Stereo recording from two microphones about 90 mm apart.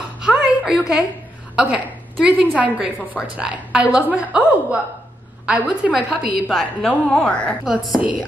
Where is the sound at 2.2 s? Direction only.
15° right (ahead or behind); by 7.5 s 10° left (ahead or behind).